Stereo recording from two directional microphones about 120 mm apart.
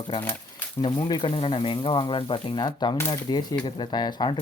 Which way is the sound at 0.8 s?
40° left (ahead or behind).